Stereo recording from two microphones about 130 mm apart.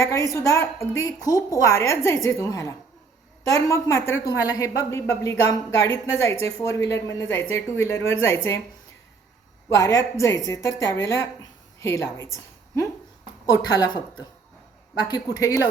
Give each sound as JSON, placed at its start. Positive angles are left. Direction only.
{"t": 0.0, "sound": "speech", "side_deg": 25}
{"t": 9.6, "sound": "a woman's voice", "side_deg": 25}